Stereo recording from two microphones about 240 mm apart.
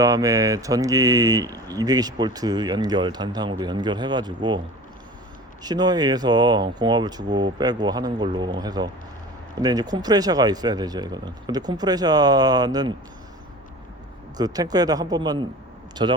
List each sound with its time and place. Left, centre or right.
0.0 s speech: centre
5.6 s speech: centre
14.3 s speech: centre